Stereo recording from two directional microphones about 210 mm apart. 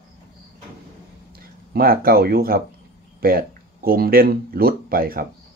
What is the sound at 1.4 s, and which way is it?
Speech, 45° right (ahead or behind).